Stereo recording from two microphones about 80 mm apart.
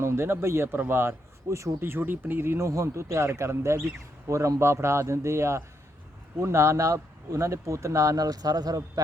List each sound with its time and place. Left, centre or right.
0.0 s speech: right